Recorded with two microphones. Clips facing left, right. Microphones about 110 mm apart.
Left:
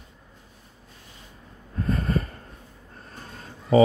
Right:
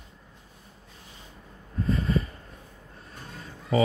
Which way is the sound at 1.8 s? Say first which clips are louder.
Left 1 dB; 50° left (ahead or behind).